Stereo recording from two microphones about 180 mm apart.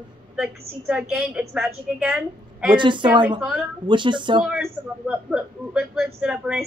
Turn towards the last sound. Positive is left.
turn(degrees=-5)  # may be behind; listen again after turning